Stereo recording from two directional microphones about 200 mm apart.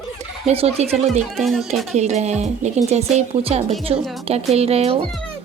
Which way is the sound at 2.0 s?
35° right (ahead or behind).